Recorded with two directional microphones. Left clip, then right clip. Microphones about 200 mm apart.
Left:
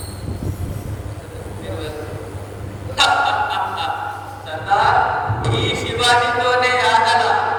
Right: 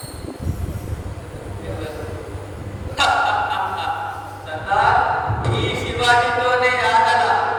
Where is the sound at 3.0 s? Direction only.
50° left (ahead or behind).